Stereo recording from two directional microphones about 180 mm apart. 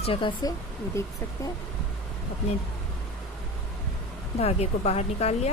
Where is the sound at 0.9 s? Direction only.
15° left (ahead or behind).